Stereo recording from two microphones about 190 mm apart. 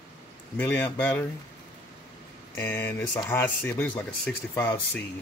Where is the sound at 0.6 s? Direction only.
10° left (ahead or behind).